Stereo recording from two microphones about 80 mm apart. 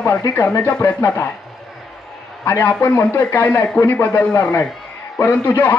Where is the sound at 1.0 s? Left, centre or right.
Left.